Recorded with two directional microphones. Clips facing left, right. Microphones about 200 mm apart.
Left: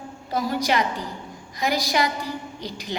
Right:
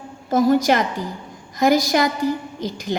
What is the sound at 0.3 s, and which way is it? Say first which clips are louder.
A woman's voice: right 8 dB; 45° right (ahead or behind).